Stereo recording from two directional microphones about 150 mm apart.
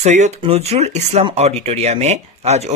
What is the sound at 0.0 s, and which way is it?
Speech, 50° right (ahead or behind).